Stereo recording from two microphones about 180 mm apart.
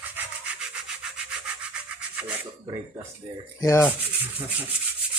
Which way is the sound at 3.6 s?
15° left (ahead or behind).